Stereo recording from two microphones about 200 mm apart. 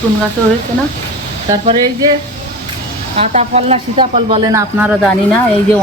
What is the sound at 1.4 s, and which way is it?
Speech, 25° right (ahead or behind).